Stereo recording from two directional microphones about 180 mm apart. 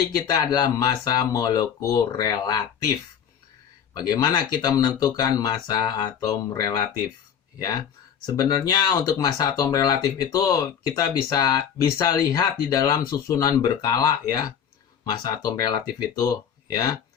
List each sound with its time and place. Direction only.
0.3 s speech: 20° left (ahead or behind)
8.4 s speech: 20° left (ahead or behind)